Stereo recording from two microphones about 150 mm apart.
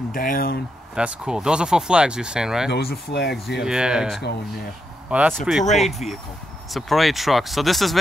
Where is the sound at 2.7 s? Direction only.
90° left.